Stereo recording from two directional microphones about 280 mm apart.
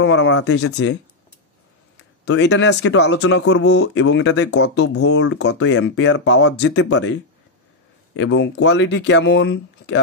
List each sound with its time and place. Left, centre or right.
0.0 s speech: left
2.2 s speech: left